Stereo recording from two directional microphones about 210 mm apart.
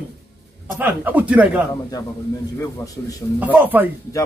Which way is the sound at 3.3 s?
10° right (ahead or behind).